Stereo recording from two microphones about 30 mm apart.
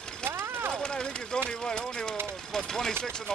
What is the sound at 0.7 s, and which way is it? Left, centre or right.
Speech, left.